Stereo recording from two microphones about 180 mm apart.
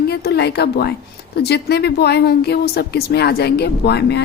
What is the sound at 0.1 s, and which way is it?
A woman's voice, 65° left (ahead or behind).